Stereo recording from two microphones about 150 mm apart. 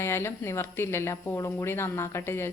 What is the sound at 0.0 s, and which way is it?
Speech, 15° left (ahead or behind).